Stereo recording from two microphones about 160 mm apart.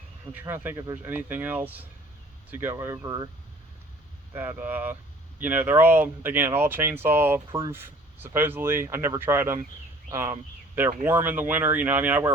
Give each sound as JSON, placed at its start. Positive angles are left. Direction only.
{"t": 0.3, "sound": "speech", "side_deg": -15}
{"t": 4.4, "sound": "speech", "side_deg": -10}